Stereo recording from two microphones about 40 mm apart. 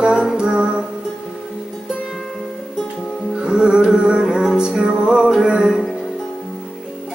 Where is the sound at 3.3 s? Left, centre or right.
Right.